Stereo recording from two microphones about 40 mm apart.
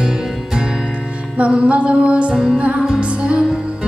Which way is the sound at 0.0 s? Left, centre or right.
Centre.